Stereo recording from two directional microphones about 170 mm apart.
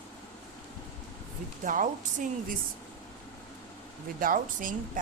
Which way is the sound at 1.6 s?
50° right (ahead or behind).